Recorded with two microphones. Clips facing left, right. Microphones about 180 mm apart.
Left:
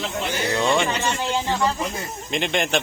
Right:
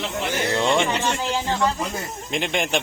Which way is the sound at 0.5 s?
20° right (ahead or behind).